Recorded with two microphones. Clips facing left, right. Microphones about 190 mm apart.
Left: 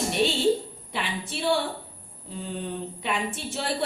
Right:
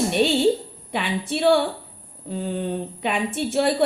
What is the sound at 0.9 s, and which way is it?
A woman's voice, 60° right (ahead or behind).